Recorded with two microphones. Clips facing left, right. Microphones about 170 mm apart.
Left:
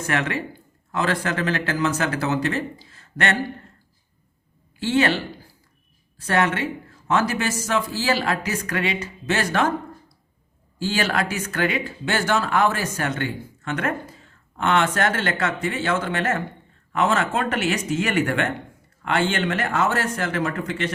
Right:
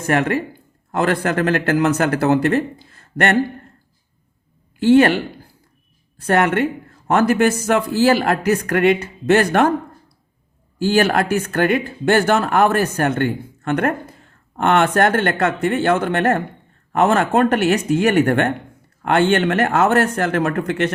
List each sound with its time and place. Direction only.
0.1 s speech: 50° right (ahead or behind)
4.8 s a woman's voice: 55° right (ahead or behind)
10.8 s speech: 55° right (ahead or behind)